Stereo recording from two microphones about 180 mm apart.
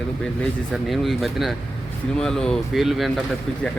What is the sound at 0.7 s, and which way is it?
Speech, centre (ahead or behind).